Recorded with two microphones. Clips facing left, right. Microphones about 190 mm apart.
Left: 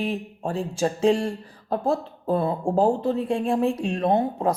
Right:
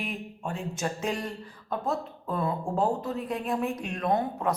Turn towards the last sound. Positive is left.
turn(degrees=30)  # may be behind; listen again after turning